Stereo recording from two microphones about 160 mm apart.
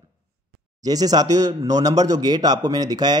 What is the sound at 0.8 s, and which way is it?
A man's voice, 25° right (ahead or behind).